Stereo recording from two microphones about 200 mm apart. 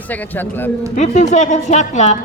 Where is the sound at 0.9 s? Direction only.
35° left (ahead or behind).